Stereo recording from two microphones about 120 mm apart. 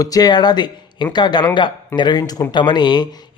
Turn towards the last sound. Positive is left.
turn(degrees=35)  # may be behind; listen again after turning